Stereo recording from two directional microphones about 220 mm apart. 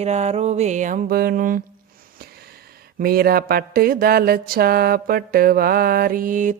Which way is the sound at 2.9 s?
45° right (ahead or behind).